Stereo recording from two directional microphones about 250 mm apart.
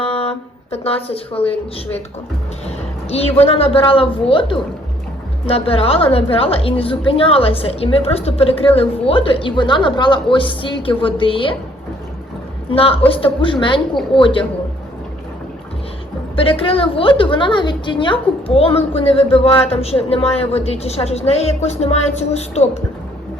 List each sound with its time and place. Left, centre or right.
0.0 s a sound: left
0.7 s a woman's voice: left
12.7 s a woman's voice: left
16.3 s a woman's voice: left